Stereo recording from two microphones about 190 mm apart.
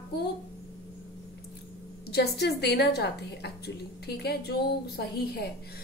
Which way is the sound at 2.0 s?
60° left (ahead or behind).